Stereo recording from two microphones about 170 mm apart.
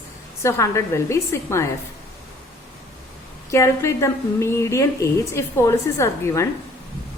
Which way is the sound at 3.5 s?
15° left (ahead or behind).